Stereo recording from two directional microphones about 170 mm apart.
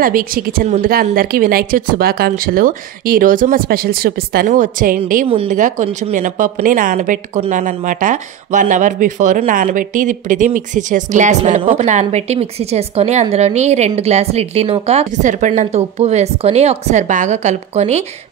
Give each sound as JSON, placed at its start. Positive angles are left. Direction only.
{"t": 0.0, "sound": "speech", "side_deg": -55}